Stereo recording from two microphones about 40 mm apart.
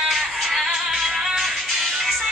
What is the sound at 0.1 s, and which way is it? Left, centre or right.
Music, centre.